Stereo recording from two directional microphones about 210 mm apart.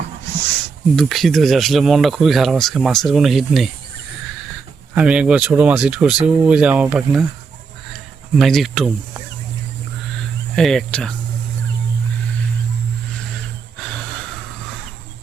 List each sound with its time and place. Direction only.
0.9 s speech: centre (ahead or behind)
4.9 s speech: 5° right (ahead or behind)
8.4 s speech: centre (ahead or behind)
10.5 s speech: centre (ahead or behind)